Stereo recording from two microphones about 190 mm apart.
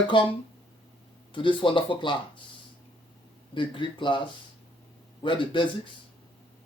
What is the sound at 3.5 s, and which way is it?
Speech, 25° left (ahead or behind).